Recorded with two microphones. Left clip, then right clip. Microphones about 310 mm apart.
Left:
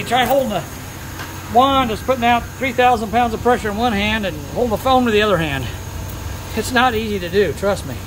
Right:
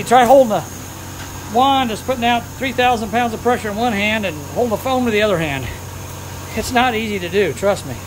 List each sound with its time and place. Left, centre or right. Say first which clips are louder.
0.0 s speech: right 6 dB; centre
1.6 s speech: even; centre